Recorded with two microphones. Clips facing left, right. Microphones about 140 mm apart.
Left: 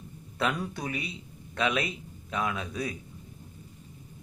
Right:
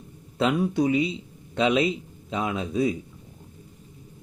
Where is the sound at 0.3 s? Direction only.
20° right (ahead or behind).